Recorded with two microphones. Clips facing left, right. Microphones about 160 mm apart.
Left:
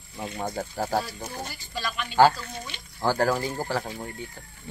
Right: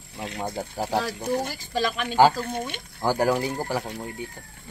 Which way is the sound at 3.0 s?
15° right (ahead or behind).